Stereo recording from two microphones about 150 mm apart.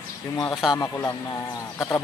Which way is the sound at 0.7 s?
20° left (ahead or behind).